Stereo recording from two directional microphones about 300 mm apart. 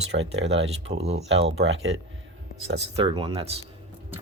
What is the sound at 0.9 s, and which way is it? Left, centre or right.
Speech, right.